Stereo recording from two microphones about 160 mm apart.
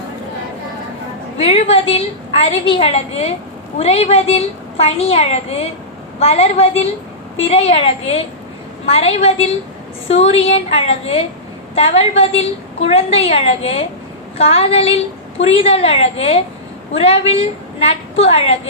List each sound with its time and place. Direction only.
1.4 s a woman's voice: 40° left (ahead or behind)